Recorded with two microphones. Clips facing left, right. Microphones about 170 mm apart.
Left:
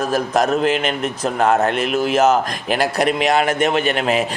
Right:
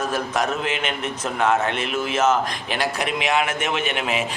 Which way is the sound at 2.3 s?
40° left (ahead or behind).